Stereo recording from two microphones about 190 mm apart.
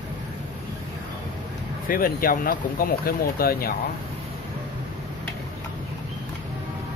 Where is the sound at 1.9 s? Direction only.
50° left (ahead or behind).